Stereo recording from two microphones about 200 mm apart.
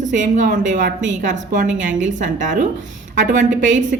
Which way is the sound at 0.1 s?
40° right (ahead or behind).